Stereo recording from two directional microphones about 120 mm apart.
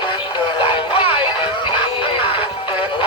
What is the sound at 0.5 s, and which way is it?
Music, 45° left (ahead or behind).